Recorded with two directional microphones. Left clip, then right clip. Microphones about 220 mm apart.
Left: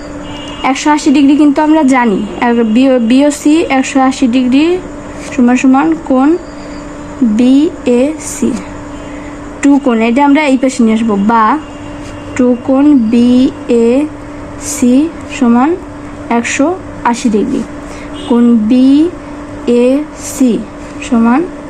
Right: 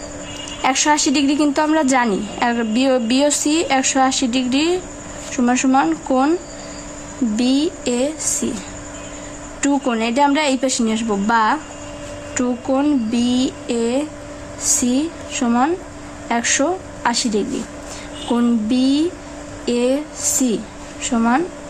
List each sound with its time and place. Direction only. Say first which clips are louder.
0.6 s a woman's voice: left 6 dB; 10° right (ahead or behind)
7.4 s a woman's voice: left 9 dB; 10° right (ahead or behind)
9.6 s a woman's voice: left 9 dB; 5° right (ahead or behind)